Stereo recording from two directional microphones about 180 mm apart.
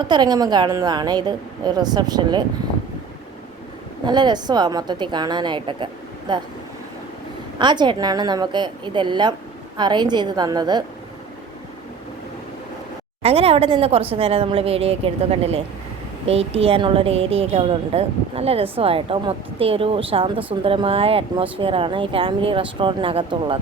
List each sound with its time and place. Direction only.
0.1 s speech: 25° right (ahead or behind)
4.0 s speech: 25° right (ahead or behind)
7.6 s speech: 25° right (ahead or behind)
13.2 s a woman's voice: 35° right (ahead or behind)